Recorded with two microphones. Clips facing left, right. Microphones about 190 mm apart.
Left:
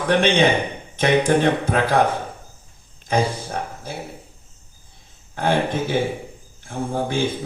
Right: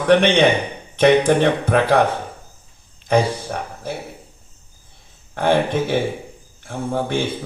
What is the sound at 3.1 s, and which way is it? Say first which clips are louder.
Speech: right 3 dB; 60° right (ahead or behind).